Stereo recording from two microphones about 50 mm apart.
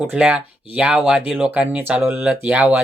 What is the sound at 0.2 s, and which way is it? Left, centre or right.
Speech, centre.